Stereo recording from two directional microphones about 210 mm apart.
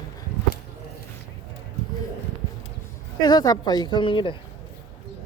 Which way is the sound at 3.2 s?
20° left (ahead or behind).